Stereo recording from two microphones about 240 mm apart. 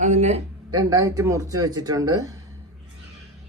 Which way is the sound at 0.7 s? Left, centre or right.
Centre.